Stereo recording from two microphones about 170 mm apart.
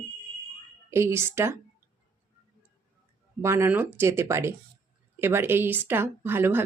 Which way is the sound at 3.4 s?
15° right (ahead or behind).